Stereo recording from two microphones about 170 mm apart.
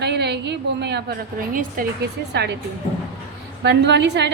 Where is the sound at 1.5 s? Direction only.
55° right (ahead or behind).